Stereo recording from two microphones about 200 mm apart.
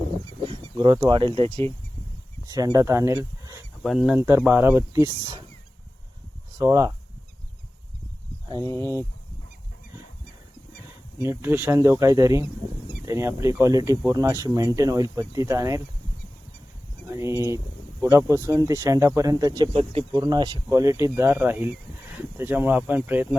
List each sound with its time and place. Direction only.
0.4 s speech: 25° right (ahead or behind)
3.8 s speech: 5° right (ahead or behind)
6.6 s speech: 15° right (ahead or behind)
8.4 s speech: 20° right (ahead or behind)
11.3 s speech: 10° right (ahead or behind)
17.1 s speech: 15° right (ahead or behind)